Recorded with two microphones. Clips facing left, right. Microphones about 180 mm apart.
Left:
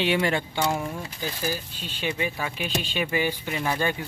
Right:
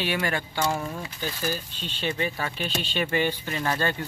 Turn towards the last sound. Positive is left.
turn(degrees=10)  # may be behind; listen again after turning